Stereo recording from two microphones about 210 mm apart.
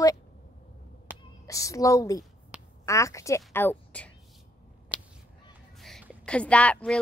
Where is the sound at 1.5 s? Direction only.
15° left (ahead or behind).